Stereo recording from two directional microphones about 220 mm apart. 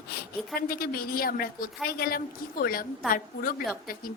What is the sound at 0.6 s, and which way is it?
A woman's voice, 45° left (ahead or behind).